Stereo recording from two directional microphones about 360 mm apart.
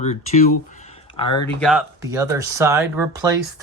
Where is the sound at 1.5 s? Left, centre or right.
Centre.